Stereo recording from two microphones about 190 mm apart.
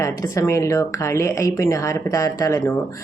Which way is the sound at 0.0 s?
15° left (ahead or behind).